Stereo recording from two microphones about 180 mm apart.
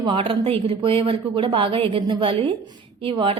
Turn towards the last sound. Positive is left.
turn(degrees=-30)  # may be behind; listen again after turning